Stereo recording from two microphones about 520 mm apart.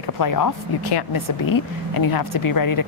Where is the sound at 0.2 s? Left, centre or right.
Left.